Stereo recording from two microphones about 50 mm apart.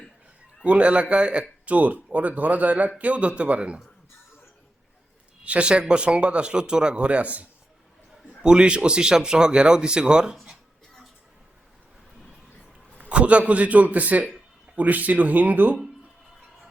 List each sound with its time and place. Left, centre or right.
0.6 s speech: right
5.5 s speech: right
8.4 s speech: centre
13.1 s speech: right